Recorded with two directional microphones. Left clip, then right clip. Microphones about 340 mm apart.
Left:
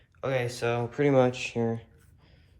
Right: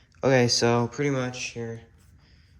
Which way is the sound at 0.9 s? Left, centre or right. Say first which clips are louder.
Left 5 dB; centre.